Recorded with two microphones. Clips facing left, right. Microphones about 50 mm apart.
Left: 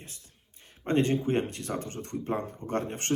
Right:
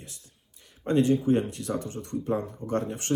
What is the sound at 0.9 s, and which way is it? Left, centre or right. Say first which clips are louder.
Speech: right 3 dB; left.